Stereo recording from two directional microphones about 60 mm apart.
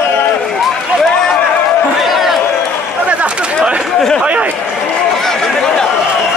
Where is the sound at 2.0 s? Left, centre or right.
Centre.